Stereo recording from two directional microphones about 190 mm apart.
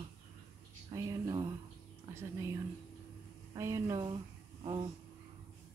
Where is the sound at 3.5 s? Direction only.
15° right (ahead or behind).